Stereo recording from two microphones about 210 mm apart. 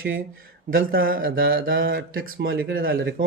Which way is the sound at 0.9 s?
45° right (ahead or behind).